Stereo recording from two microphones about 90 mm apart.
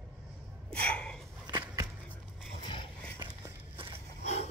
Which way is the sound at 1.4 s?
45° right (ahead or behind).